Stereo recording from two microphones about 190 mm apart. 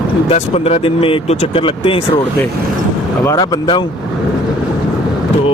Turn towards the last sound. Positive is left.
turn(degrees=20)  # may be behind; listen again after turning